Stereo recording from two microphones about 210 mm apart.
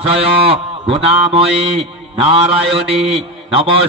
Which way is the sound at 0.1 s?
25° right (ahead or behind).